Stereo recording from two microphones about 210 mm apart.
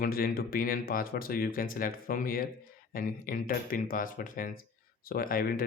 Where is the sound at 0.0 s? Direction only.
45° left (ahead or behind).